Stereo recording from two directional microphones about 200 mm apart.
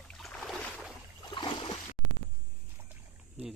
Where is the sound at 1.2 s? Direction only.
25° left (ahead or behind).